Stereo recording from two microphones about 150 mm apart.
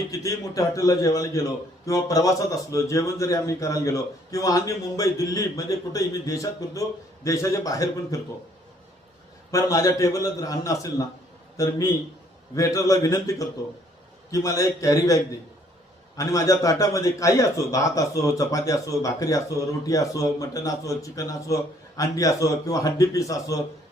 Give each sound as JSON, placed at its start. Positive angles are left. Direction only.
{"t": 0.1, "sound": "a man's voice", "side_deg": 20}
{"t": 9.5, "sound": "a man's voice", "side_deg": 20}